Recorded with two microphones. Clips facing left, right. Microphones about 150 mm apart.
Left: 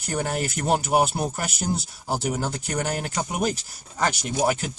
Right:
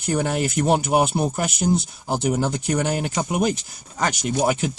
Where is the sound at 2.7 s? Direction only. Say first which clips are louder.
Right 3 dB; 5° right (ahead or behind).